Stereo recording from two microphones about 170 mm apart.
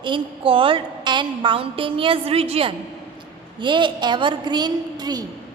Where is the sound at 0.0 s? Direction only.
30° right (ahead or behind).